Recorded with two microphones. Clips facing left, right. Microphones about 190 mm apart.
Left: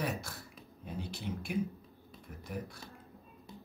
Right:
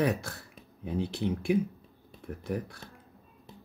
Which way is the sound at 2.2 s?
60° right (ahead or behind).